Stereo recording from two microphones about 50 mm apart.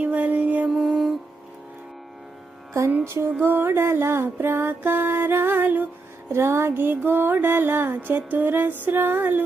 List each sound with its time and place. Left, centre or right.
0.0 s music: right
0.7 s music: centre
3.0 s music: right
6.3 s music: right